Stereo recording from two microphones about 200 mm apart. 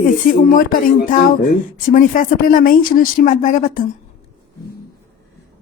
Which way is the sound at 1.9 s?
40° left (ahead or behind).